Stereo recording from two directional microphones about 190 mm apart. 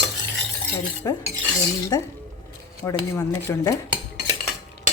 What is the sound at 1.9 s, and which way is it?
Dishes, 20° left (ahead or behind).